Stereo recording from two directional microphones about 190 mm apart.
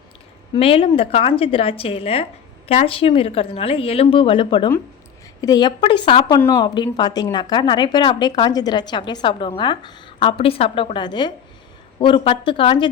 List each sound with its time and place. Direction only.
0.5 s a woman's voice: 30° left (ahead or behind)